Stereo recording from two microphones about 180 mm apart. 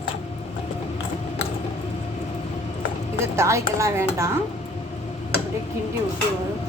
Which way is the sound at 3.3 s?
15° right (ahead or behind).